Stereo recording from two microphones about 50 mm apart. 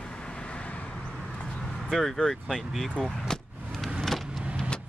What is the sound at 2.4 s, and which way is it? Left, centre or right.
Speech, centre.